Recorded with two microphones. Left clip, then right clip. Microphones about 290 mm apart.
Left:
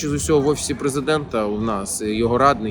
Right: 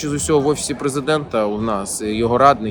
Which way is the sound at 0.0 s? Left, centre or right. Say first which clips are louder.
Right 1 dB; centre.